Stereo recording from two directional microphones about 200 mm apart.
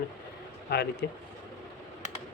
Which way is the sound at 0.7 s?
55° left (ahead or behind).